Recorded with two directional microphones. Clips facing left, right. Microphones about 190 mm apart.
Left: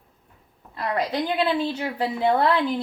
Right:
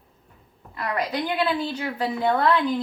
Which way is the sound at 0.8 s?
25° left (ahead or behind).